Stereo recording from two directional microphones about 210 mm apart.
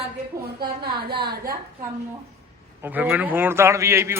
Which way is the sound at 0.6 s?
50° right (ahead or behind).